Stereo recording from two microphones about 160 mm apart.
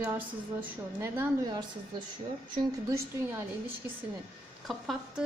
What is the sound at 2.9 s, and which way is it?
Speech, 15° right (ahead or behind).